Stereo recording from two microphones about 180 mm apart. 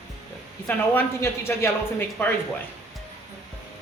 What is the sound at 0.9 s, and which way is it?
Speech, 15° left (ahead or behind).